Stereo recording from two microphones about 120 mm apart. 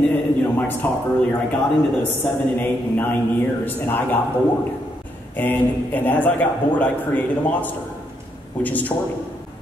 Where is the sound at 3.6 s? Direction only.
15° left (ahead or behind).